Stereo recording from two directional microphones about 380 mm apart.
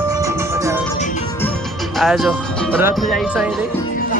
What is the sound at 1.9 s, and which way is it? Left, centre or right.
Speech, centre.